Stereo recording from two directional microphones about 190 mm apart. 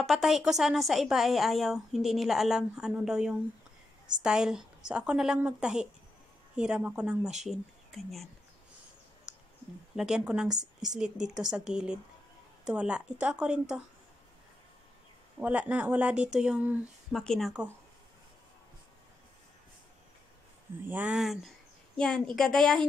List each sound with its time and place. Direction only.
0.0 s speech: centre (ahead or behind)
9.3 s clicking: 5° right (ahead or behind)
9.9 s speech: 5° right (ahead or behind)
15.4 s speech: 5° right (ahead or behind)
20.9 s speech: 5° right (ahead or behind)